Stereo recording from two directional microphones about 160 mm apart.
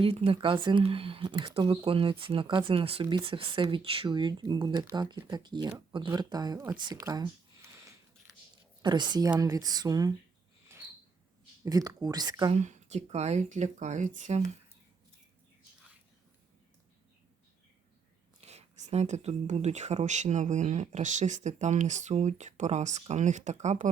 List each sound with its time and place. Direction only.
0.0 s speech: 35° right (ahead or behind)
6.7 s a sound: 25° right (ahead or behind)
8.8 s speech: 30° right (ahead or behind)
10.7 s a sound: 15° right (ahead or behind)
11.6 s speech: 25° right (ahead or behind)
12.5 s speech: 45° right (ahead or behind)
18.3 s speech: 40° right (ahead or behind)